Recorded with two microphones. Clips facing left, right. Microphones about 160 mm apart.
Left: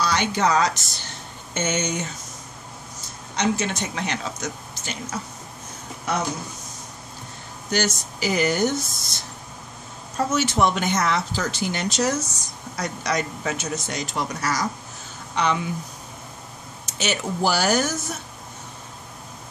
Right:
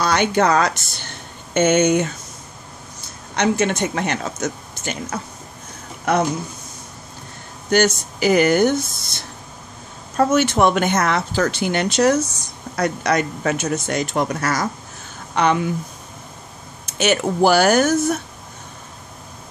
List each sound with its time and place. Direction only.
0.0 s speech: 55° right (ahead or behind)
3.3 s speech: 60° right (ahead or behind)
7.7 s speech: 55° right (ahead or behind)
16.8 s speech: 55° right (ahead or behind)